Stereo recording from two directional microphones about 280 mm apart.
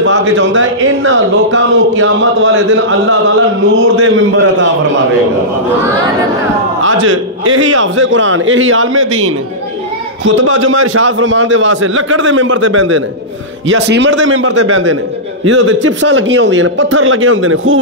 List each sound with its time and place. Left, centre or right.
0.0 s a man's voice: right
6.8 s a man's voice: right
10.3 s a man's voice: right
15.4 s a man's voice: right